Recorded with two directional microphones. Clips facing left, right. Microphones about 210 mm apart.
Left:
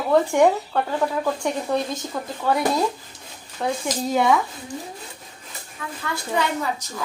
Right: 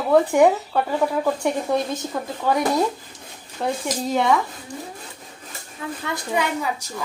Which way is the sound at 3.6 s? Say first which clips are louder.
Even; centre (ahead or behind).